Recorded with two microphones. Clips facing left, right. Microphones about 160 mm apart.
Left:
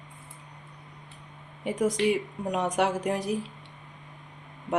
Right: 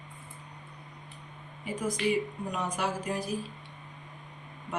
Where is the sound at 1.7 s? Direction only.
80° left.